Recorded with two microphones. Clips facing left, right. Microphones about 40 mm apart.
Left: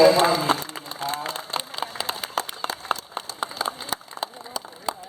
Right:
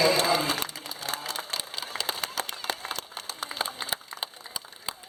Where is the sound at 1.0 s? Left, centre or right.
Left.